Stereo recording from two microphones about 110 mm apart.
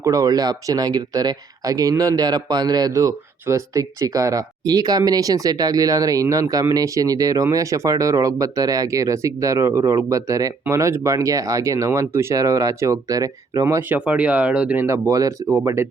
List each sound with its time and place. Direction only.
0.0 s speech: 35° right (ahead or behind)
13.9 s speech: 15° right (ahead or behind)
14.8 s speech: 25° right (ahead or behind)